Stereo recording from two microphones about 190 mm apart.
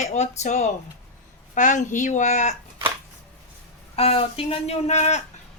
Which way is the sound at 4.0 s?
30° left (ahead or behind).